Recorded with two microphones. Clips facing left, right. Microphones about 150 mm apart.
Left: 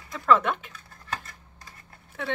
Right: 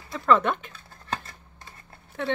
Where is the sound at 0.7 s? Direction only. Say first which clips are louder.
Right 2 dB; 30° right (ahead or behind).